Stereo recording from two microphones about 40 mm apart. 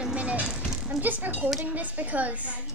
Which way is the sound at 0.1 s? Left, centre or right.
Right.